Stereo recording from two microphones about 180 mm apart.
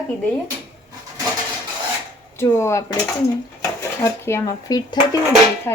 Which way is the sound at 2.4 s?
15° left (ahead or behind).